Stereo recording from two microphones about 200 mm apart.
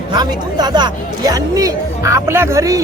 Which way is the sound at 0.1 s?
20° right (ahead or behind).